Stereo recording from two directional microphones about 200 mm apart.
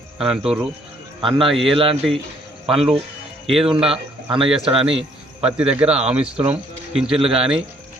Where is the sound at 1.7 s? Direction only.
25° right (ahead or behind).